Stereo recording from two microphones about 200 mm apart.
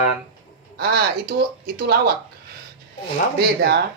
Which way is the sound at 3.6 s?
55° right (ahead or behind).